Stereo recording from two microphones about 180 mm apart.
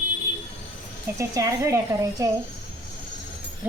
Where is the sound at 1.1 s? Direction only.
15° right (ahead or behind).